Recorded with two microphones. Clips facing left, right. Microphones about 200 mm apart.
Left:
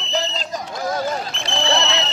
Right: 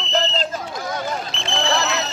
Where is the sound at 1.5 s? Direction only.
20° left (ahead or behind).